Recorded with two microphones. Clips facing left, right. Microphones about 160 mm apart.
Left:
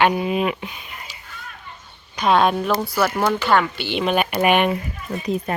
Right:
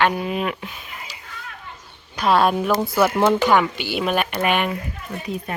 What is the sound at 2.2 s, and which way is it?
Speech, 5° right (ahead or behind).